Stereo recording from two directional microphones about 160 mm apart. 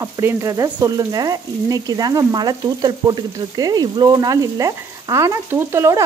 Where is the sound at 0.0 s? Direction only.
15° right (ahead or behind).